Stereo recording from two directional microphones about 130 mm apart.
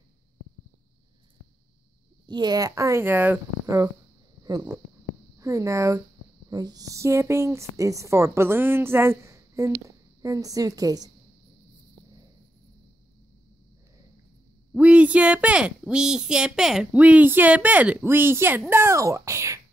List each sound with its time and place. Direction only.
2.2 s a woman's voice: 35° right (ahead or behind)
14.7 s a woman's voice: 10° right (ahead or behind)